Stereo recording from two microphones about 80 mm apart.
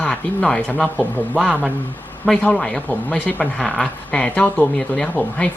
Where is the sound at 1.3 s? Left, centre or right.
Centre.